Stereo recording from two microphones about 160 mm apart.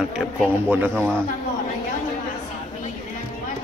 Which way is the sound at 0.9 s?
5° left (ahead or behind).